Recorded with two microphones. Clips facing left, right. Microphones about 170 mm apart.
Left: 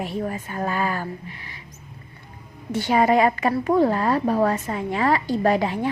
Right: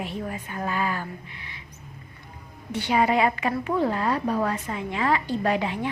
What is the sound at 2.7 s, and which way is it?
A woman's voice, 45° left (ahead or behind).